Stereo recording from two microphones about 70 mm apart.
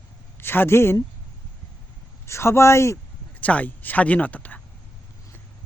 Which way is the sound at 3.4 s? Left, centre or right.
Left.